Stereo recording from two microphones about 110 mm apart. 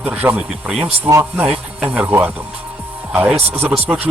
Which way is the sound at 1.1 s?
25° right (ahead or behind).